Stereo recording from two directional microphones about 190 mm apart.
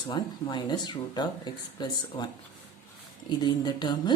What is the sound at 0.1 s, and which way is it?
Speech, 20° left (ahead or behind).